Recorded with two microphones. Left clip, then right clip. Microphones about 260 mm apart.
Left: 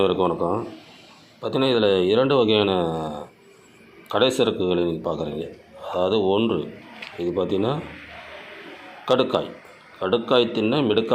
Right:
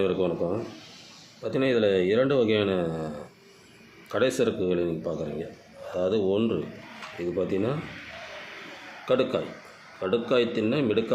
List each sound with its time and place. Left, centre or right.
0.0 s speech: centre
4.1 s speech: centre
9.0 s speech: centre